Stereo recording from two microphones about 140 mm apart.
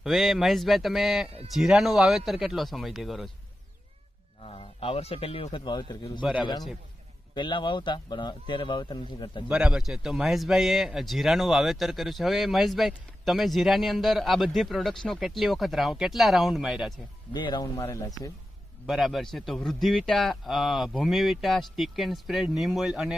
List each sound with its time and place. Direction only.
0.0 s speech: centre (ahead or behind)
4.4 s speech: 40° left (ahead or behind)
9.5 s speech: 5° right (ahead or behind)
17.3 s speech: 30° left (ahead or behind)
18.9 s speech: centre (ahead or behind)